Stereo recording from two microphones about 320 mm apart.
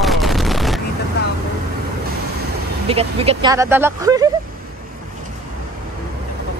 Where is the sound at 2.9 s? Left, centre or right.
Centre.